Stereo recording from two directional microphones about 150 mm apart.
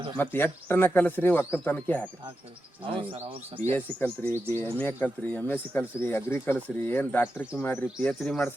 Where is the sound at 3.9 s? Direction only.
10° left (ahead or behind).